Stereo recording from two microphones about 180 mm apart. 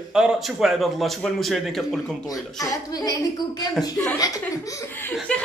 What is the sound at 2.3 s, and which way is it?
A woman's voice, 20° left (ahead or behind).